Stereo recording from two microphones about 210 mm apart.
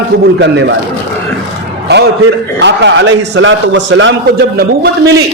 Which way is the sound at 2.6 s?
60° right (ahead or behind).